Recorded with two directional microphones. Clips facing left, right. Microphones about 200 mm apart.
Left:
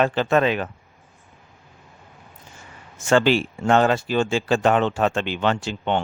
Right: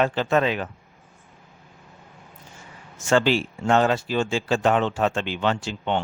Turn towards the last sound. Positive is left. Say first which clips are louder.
# left 2 dB
turn(degrees=60)  # may be behind; listen again after turning